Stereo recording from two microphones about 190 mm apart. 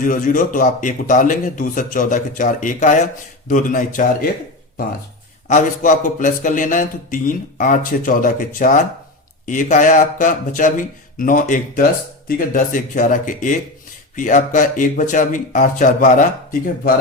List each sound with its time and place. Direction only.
0.0 s a man's voice: 45° left (ahead or behind)
5.5 s a man's voice: 40° left (ahead or behind)